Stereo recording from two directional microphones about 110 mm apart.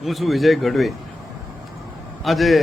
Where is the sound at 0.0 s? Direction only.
Centre (ahead or behind).